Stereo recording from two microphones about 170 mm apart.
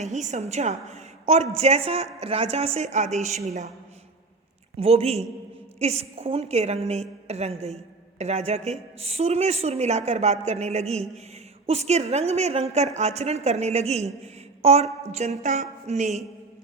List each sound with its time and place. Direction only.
0.0 s a woman's voice: 45° right (ahead or behind)
4.8 s a woman's voice: 35° right (ahead or behind)